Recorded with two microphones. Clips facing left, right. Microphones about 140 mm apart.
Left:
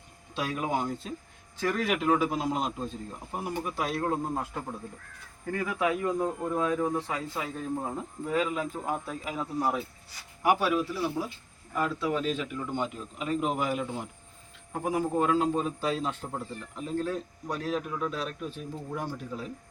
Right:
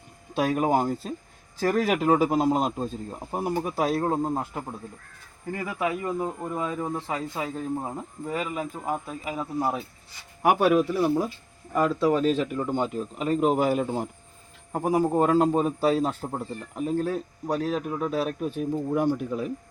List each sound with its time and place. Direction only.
0.3 s a man's voice: 50° right (ahead or behind)
4.0 s a man's voice: 25° right (ahead or behind)
5.5 s speech: 10° right (ahead or behind)
8.3 s speech: 5° right (ahead or behind)
10.4 s a man's voice: 50° right (ahead or behind)